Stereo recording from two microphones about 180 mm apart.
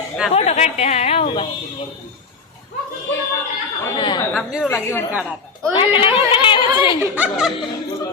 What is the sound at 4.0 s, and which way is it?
Speech, 25° left (ahead or behind).